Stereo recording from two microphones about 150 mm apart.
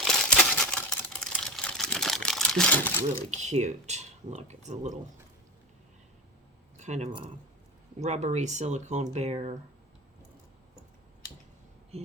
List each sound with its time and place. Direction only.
0.0 s a sound: 5° left (ahead or behind)
3.3 s speech: 50° right (ahead or behind)
6.7 s a sound: 50° right (ahead or behind)
7.1 s speech: 35° right (ahead or behind)
7.9 s speech: 50° right (ahead or behind)
11.9 s speech: 45° right (ahead or behind)